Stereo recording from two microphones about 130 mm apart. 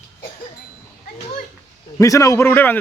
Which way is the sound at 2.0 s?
25° left (ahead or behind).